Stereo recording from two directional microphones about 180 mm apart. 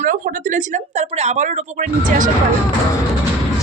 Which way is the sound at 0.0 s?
50° right (ahead or behind).